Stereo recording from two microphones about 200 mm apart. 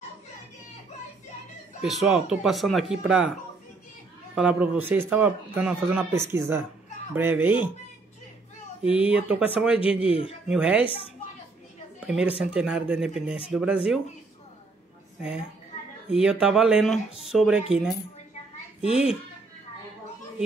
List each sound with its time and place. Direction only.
1.8 s speech: centre (ahead or behind)
4.4 s a man's voice: 5° right (ahead or behind)
9.0 s a man's voice: 5° right (ahead or behind)
10.0 s speech: 30° left (ahead or behind)
10.5 s a man's voice: 5° right (ahead or behind)
12.0 s speech: 5° right (ahead or behind)
16.1 s speech: 5° right (ahead or behind)